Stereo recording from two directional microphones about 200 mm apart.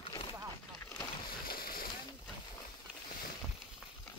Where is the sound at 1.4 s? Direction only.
45° left (ahead or behind).